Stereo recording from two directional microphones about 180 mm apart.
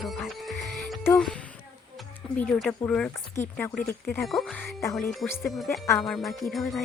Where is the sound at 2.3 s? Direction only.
5° left (ahead or behind).